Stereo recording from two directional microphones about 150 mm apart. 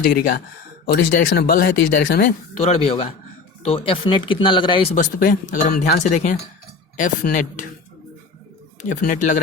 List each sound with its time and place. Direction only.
0.2 s speech: 75° left (ahead or behind); by 2.2 s 90° left
2.6 s speech: 45° left (ahead or behind)
4.9 s speech: 65° left (ahead or behind)
8.8 s speech: 60° left (ahead or behind)